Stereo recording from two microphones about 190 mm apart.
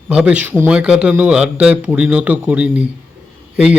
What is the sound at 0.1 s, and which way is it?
A man's voice, 5° right (ahead or behind).